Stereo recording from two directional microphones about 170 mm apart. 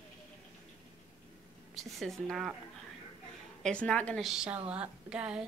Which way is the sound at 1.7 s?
Centre (ahead or behind).